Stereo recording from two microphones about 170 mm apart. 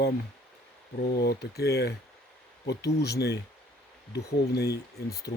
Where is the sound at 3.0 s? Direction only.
75° left (ahead or behind).